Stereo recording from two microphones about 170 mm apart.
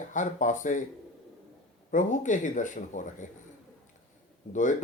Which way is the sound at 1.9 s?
50° left (ahead or behind).